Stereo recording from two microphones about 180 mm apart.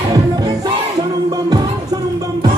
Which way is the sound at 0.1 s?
20° right (ahead or behind).